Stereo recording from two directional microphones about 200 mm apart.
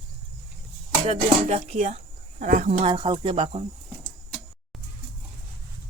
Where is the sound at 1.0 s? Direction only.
30° right (ahead or behind).